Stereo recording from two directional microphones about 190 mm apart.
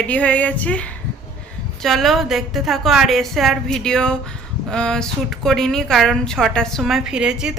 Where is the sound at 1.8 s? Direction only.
Centre (ahead or behind).